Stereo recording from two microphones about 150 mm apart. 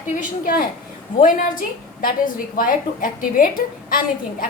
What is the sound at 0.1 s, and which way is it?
A woman's voice, 60° left (ahead or behind).